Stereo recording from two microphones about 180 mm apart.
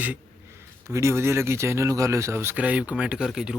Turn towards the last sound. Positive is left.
turn(degrees=-5)  # may be behind; listen again after turning